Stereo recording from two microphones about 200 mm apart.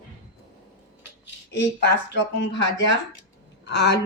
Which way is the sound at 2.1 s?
60° left (ahead or behind).